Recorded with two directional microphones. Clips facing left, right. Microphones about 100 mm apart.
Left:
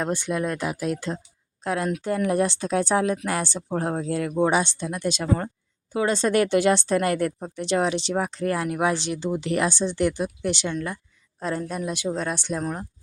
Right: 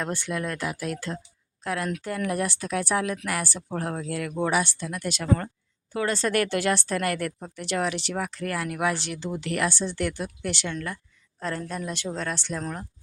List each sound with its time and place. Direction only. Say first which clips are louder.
0.0 s speech: left 4 dB; 20° left (ahead or behind)